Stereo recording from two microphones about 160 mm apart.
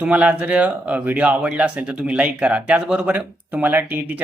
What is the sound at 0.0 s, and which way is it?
Speech, 10° right (ahead or behind).